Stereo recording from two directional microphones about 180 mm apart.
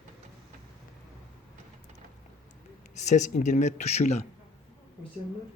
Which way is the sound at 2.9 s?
40° left (ahead or behind).